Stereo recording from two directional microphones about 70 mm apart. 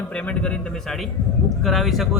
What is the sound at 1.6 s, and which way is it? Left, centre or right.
Speech, centre.